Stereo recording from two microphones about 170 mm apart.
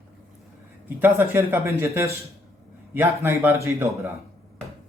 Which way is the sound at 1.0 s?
15° right (ahead or behind).